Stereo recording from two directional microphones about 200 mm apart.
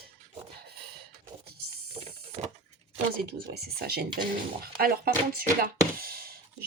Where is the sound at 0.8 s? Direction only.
55° right (ahead or behind).